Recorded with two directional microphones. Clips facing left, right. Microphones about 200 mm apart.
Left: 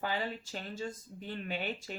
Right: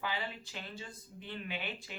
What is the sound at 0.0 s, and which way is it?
Speech, 45° left (ahead or behind).